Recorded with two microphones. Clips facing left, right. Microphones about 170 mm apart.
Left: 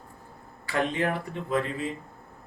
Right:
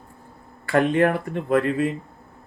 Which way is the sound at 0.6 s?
55° right (ahead or behind).